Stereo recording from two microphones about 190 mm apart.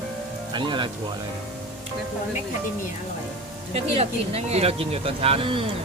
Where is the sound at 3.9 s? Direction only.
35° right (ahead or behind).